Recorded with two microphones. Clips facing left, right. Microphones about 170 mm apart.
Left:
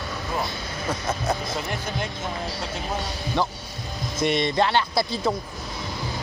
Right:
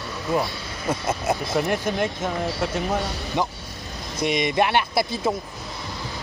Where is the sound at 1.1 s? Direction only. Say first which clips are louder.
Right 3 dB; 10° right (ahead or behind).